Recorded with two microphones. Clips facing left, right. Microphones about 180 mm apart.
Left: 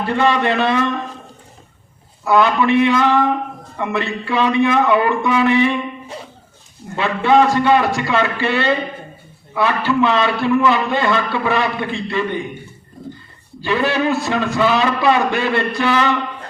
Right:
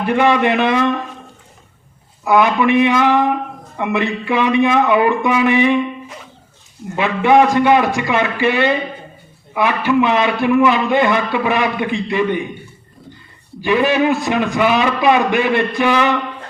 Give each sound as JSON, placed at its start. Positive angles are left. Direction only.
{"t": 0.0, "sound": "a man's voice", "side_deg": -15}
{"t": 2.2, "sound": "a man's voice", "side_deg": -15}
{"t": 6.9, "sound": "a man's voice", "side_deg": -15}
{"t": 13.6, "sound": "a man's voice", "side_deg": -15}